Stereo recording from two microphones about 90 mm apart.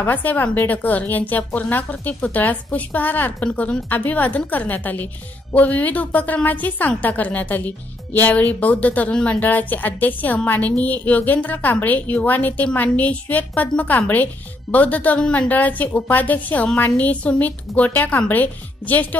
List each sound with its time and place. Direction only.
0.0 s a woman's voice: 20° left (ahead or behind)